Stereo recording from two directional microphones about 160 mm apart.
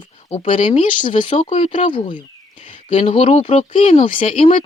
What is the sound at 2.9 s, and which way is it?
Speech, 45° left (ahead or behind).